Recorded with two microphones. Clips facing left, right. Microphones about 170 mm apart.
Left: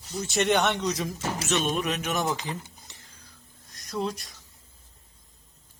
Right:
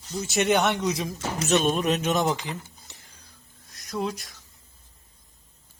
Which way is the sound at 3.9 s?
Centre (ahead or behind).